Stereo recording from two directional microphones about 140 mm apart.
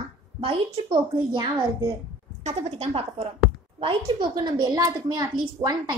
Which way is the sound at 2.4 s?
50° right (ahead or behind).